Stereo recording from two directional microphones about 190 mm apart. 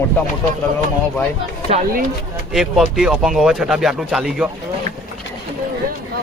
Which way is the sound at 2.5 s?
5° right (ahead or behind).